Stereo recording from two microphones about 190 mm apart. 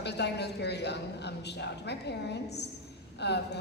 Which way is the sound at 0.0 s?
60° left (ahead or behind).